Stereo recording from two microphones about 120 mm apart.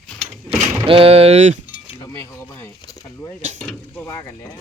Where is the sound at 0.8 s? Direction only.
50° right (ahead or behind); by 1.6 s 65° right (ahead or behind).